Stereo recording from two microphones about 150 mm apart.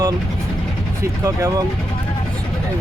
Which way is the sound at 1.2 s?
20° right (ahead or behind).